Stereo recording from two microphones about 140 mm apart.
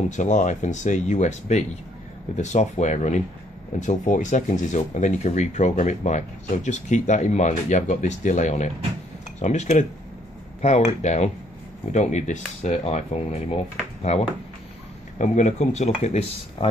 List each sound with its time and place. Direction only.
0.1 s speech: 60° left (ahead or behind); by 14.2 s 45° left (ahead or behind)
15.1 s speech: 60° left (ahead or behind)